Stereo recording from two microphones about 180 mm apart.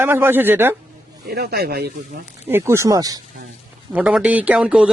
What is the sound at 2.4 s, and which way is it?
Speech, 15° right (ahead or behind).